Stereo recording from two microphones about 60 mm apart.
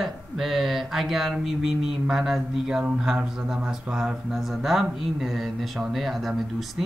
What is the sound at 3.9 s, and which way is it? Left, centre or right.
Speech, centre.